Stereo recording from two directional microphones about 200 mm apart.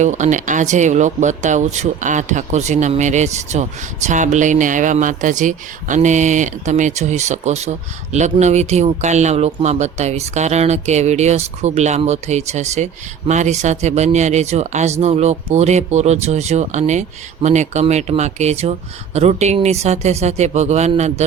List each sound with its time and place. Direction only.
0.0 s speech: 35° right (ahead or behind)